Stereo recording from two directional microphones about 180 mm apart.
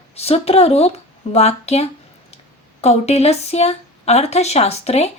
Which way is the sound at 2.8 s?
35° left (ahead or behind).